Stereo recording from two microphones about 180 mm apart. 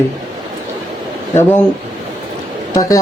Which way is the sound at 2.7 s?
20° left (ahead or behind).